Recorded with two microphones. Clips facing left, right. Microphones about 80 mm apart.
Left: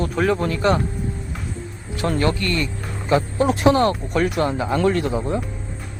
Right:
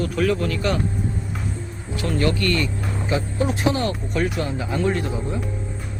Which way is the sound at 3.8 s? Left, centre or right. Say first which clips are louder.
Left 5 dB; left.